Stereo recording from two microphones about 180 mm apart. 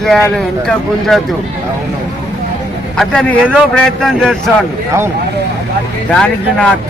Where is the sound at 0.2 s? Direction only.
5° left (ahead or behind).